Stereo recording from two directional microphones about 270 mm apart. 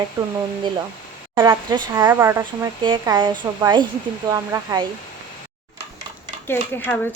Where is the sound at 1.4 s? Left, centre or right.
Centre.